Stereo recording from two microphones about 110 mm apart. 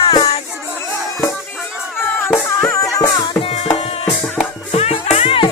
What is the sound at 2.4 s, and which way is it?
Music, 25° left (ahead or behind).